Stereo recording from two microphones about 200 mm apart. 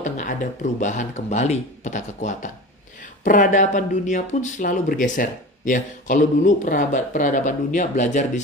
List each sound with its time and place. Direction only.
0.0 s speech: 40° left (ahead or behind)